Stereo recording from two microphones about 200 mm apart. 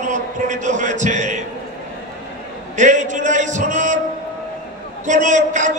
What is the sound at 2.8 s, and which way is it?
A man's voice, 35° right (ahead or behind).